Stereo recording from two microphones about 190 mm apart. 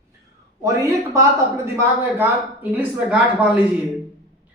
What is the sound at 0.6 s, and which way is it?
Speech, 15° right (ahead or behind).